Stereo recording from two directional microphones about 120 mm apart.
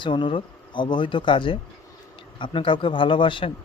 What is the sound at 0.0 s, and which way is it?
A man's voice, 45° left (ahead or behind).